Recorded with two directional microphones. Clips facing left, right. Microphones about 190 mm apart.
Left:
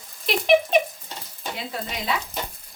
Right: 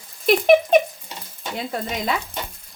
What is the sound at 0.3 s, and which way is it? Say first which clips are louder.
Speech: right 5 dB; 50° right (ahead or behind).